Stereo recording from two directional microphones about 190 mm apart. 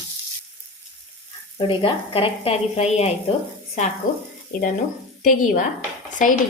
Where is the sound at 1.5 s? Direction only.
25° left (ahead or behind).